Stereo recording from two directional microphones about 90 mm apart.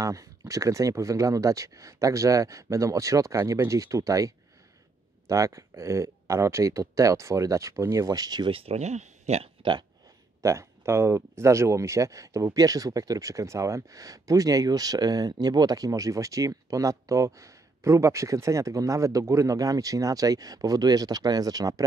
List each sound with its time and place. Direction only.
0.0 s speech: 40° right (ahead or behind)
8.5 s speech: 90° right
9.4 s speech: 65° right (ahead or behind)
10.4 s speech: 35° right (ahead or behind)